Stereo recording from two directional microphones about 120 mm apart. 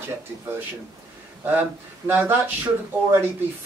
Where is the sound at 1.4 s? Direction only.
15° right (ahead or behind).